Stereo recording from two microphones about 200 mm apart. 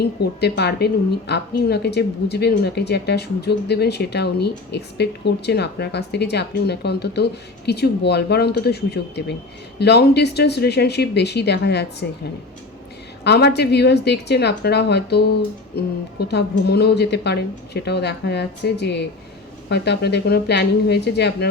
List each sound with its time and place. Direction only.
0.0 s speech: 55° left (ahead or behind)
13.2 s speech: 55° left (ahead or behind)